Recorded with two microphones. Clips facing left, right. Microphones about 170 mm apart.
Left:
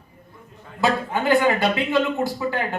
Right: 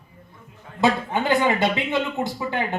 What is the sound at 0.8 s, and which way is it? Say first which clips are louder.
Speech: right 1 dB; 20° right (ahead or behind).